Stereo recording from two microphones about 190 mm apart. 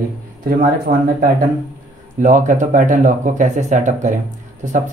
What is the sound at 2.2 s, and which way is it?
Speech, 40° right (ahead or behind).